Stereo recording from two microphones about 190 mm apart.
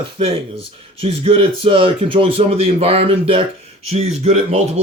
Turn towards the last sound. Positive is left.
turn(degrees=-35)  # may be behind; listen again after turning